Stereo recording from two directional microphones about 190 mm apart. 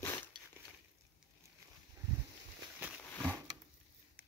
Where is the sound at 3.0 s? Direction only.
10° left (ahead or behind).